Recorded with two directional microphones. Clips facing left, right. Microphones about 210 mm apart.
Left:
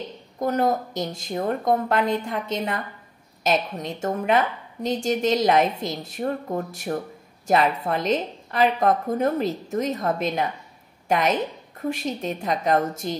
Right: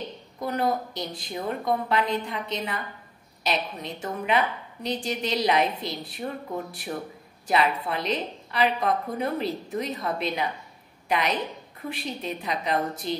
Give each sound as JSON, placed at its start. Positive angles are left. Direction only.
{"t": 0.4, "sound": "a woman's voice", "side_deg": 45}